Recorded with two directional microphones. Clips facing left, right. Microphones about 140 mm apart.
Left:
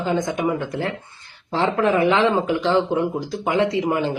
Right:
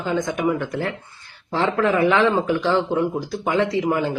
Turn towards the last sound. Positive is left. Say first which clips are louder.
# even
turn(degrees=20)  # may be behind; listen again after turning